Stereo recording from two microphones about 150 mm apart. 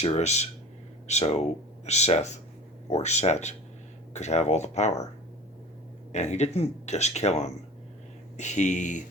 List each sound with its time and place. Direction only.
0.0 s speech: 45° left (ahead or behind)
6.1 s speech: 50° left (ahead or behind)